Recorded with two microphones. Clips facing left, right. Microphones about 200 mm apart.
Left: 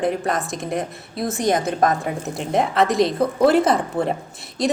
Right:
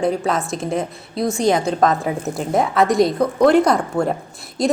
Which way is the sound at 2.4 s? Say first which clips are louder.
Right 1 dB; centre (ahead or behind).